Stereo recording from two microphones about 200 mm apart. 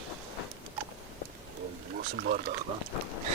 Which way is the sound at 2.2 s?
45° right (ahead or behind).